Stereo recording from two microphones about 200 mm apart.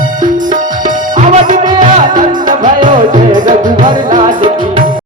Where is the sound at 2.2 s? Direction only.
40° right (ahead or behind).